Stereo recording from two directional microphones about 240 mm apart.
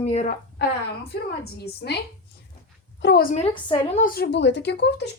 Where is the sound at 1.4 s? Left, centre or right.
Left.